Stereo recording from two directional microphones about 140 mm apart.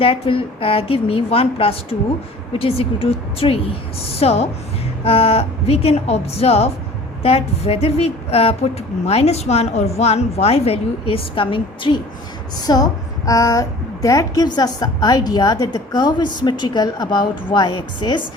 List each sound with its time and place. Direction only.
0.0 s a woman's voice: 40° left (ahead or behind)